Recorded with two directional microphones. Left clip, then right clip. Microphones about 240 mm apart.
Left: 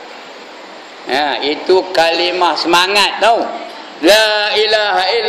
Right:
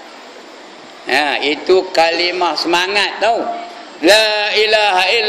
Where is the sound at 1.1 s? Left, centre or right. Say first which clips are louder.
Even; right.